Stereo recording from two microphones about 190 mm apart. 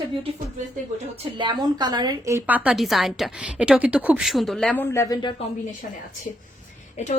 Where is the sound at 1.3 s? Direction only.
25° right (ahead or behind); by 5.3 s 20° left (ahead or behind).